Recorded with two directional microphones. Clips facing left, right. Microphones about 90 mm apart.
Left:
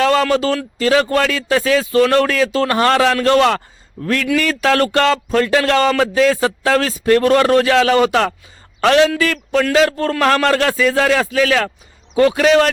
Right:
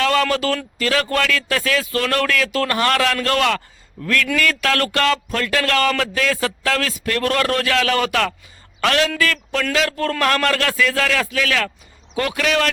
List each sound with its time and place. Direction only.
0.0 s a man's voice: 25° left (ahead or behind)